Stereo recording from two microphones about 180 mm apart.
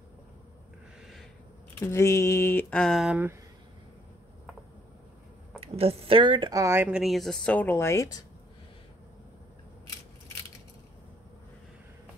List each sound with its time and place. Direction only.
1.8 s speech: 15° left (ahead or behind); by 3.3 s 5° right (ahead or behind)
5.6 s speech: 35° right (ahead or behind); by 8.2 s 15° left (ahead or behind)